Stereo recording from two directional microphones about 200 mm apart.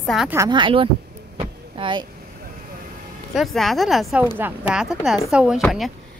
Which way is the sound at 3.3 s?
Centre (ahead or behind).